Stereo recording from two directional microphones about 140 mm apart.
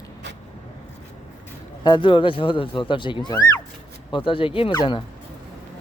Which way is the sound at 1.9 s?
35° left (ahead or behind).